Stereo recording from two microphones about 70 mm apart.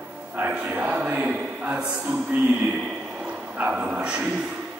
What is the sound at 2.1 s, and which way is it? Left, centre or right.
Music, right.